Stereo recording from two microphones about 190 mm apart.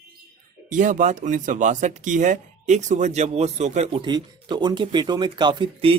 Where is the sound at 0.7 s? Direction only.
40° right (ahead or behind).